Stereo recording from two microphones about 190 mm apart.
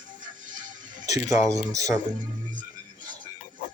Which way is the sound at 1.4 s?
15° right (ahead or behind).